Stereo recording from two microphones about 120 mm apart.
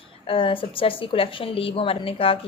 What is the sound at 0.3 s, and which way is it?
A woman's voice, 45° left (ahead or behind).